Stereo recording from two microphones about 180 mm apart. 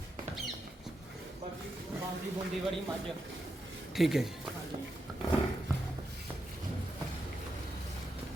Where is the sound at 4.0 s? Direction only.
Centre (ahead or behind).